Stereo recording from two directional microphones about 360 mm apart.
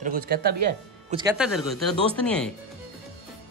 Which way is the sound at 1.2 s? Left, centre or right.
Centre.